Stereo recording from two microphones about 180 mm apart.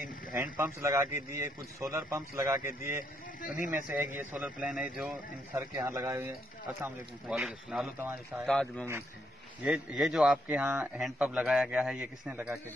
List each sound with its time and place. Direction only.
0.3 s a man's voice: 15° right (ahead or behind)
6.8 s speech: 5° right (ahead or behind)
9.6 s a man's voice: 5° right (ahead or behind)